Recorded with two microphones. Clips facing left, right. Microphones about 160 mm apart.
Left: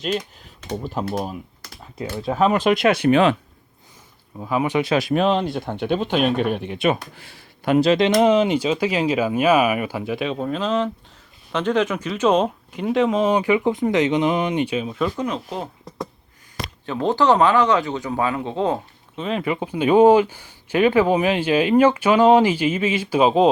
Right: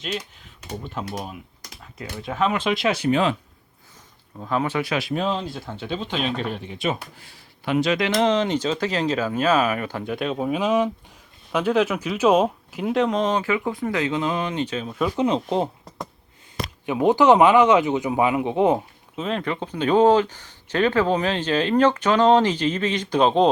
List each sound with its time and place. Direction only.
0.7 s speech: 35° left (ahead or behind); by 3.3 s 70° left (ahead or behind)
4.4 s speech: 10° left (ahead or behind)
5.1 s speech: 70° left (ahead or behind)
7.6 s speech: 45° left (ahead or behind)
7.9 s speech: 25° left (ahead or behind)
15.1 s speech: 25° right (ahead or behind)
16.8 s speech: 15° right (ahead or behind)
19.1 s speech: centre (ahead or behind)